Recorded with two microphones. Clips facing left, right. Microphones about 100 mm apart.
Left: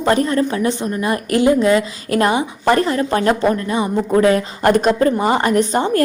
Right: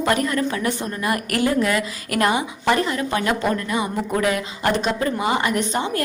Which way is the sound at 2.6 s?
40° left (ahead or behind).